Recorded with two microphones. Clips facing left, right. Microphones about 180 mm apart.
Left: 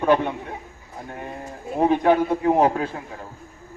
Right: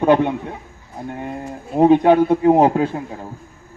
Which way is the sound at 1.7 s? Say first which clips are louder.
Right 6 dB; 25° right (ahead or behind).